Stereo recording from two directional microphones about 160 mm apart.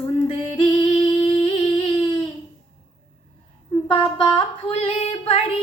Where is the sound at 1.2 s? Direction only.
35° left (ahead or behind).